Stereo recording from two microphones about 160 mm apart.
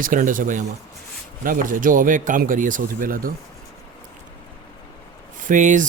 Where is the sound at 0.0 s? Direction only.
55° right (ahead or behind).